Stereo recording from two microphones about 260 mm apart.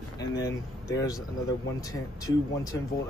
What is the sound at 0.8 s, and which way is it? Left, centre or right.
Speech, centre.